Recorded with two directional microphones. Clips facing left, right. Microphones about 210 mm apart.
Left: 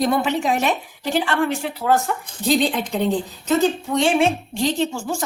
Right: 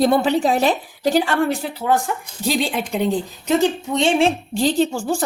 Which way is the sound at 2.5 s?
10° right (ahead or behind).